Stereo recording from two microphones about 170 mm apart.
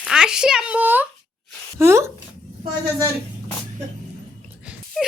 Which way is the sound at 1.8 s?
15° right (ahead or behind).